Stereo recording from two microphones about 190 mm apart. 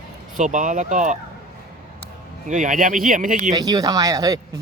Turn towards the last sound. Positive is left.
turn(degrees=-20)  # may be behind; listen again after turning